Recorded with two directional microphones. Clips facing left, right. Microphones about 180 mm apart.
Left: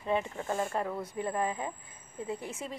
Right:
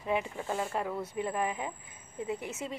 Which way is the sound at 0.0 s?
10° right (ahead or behind).